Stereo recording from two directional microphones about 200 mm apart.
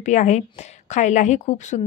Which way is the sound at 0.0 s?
35° left (ahead or behind).